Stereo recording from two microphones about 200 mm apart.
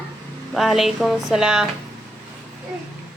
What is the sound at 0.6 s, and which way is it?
A woman's voice, centre (ahead or behind).